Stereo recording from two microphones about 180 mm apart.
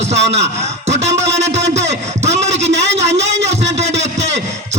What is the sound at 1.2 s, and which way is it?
Music, 40° right (ahead or behind).